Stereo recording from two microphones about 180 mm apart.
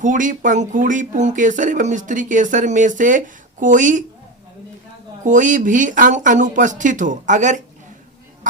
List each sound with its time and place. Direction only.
0.0 s speech: 45° right (ahead or behind)
5.2 s speech: 45° right (ahead or behind)